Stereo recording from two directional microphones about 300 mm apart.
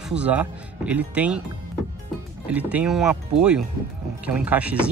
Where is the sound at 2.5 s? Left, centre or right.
Centre.